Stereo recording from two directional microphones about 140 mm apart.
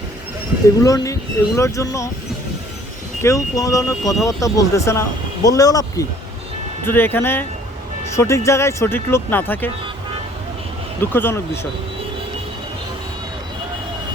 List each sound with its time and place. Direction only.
0.8 s speech: 25° left (ahead or behind)
3.2 s speech: 20° left (ahead or behind)
11.0 s speech: 15° left (ahead or behind)